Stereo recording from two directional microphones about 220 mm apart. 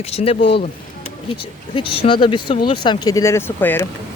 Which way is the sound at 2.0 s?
20° left (ahead or behind).